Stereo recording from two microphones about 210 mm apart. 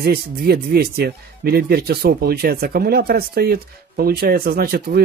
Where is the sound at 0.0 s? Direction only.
45° right (ahead or behind).